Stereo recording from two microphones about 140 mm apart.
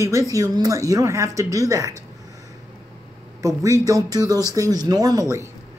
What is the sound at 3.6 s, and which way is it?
Speech, 25° right (ahead or behind).